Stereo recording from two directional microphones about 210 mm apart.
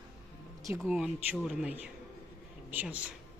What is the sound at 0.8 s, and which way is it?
Speech, centre (ahead or behind).